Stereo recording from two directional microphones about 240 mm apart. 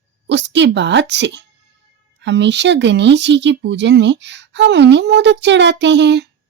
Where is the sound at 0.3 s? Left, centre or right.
Right.